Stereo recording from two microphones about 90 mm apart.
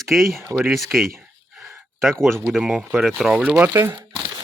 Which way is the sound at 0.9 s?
20° right (ahead or behind).